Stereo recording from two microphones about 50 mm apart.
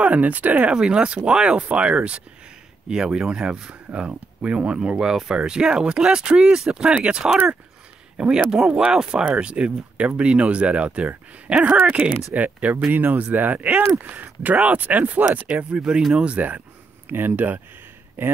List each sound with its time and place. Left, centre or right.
0.0 s speech: right
0.7 s speech: centre
2.9 s speech: centre; by 15.8 s right
16.1 s speech: centre
16.3 s speech: right